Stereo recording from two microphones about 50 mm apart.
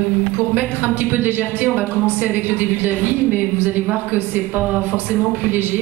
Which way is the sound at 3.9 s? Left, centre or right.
Right.